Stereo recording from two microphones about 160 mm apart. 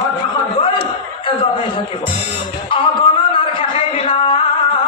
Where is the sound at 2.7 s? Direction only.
35° left (ahead or behind).